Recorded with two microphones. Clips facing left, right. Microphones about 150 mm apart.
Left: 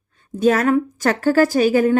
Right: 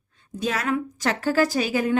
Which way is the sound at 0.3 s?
50° left (ahead or behind).